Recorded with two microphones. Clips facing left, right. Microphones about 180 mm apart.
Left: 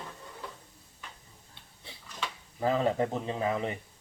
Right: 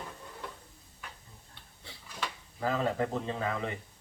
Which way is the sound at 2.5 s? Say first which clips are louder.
Left 3 dB; 20° left (ahead or behind).